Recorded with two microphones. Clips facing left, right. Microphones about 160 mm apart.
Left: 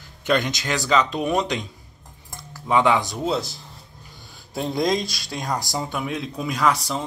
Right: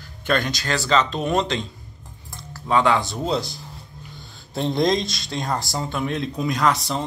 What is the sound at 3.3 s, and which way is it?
Speech, centre (ahead or behind).